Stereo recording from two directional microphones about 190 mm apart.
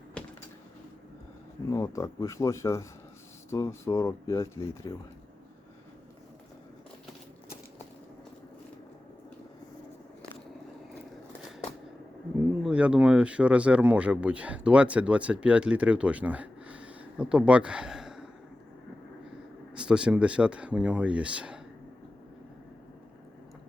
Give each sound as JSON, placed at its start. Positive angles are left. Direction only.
{"t": 1.7, "sound": "speech", "side_deg": 15}
{"t": 12.6, "sound": "speech", "side_deg": -5}
{"t": 19.7, "sound": "speech", "side_deg": -5}